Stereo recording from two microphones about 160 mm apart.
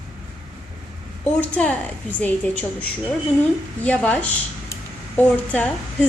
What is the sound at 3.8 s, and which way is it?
Speech, 10° left (ahead or behind).